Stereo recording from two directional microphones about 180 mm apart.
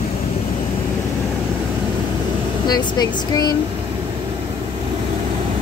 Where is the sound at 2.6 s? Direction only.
25° left (ahead or behind).